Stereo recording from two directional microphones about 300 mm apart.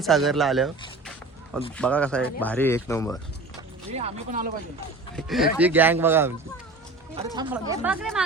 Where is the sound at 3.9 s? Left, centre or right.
Right.